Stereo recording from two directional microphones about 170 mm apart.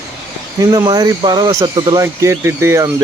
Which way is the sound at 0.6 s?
20° right (ahead or behind).